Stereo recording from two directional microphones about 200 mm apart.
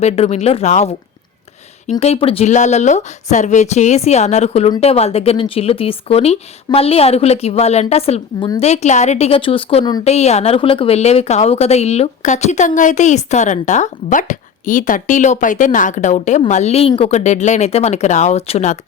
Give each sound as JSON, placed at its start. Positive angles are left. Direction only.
{"t": 0.0, "sound": "a woman's voice", "side_deg": 35}